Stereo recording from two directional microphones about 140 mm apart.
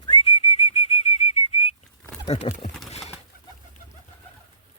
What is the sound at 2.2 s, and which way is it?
Speech, 55° left (ahead or behind).